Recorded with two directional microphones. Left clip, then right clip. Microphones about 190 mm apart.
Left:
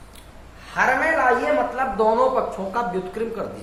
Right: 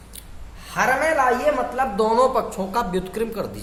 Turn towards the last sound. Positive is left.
turn(degrees=-45)  # may be behind; listen again after turning